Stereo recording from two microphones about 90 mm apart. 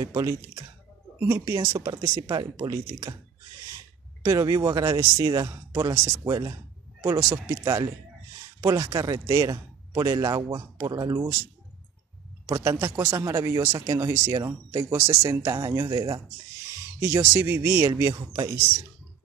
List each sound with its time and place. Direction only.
0.0 s a man's voice: 40° right (ahead or behind)
4.2 s a man's voice: 40° right (ahead or behind)
12.4 s a man's voice: 35° right (ahead or behind)
17.0 s a man's voice: 30° right (ahead or behind)